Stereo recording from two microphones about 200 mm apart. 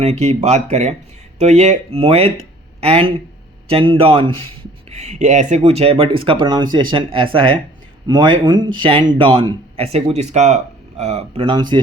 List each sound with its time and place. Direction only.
0.0 s a man's voice: 30° right (ahead or behind)